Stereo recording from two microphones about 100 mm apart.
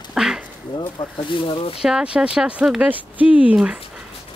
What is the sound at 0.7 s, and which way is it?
Speech, 50° left (ahead or behind).